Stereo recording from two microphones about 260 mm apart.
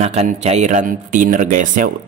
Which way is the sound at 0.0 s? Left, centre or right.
Right.